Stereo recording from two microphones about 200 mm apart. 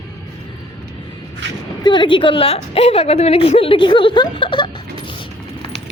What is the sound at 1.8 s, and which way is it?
A woman's voice, 25° left (ahead or behind).